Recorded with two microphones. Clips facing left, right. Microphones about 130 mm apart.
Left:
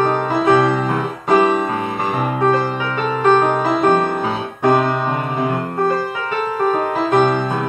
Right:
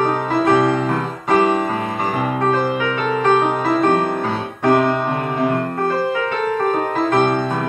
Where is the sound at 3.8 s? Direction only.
5° left (ahead or behind).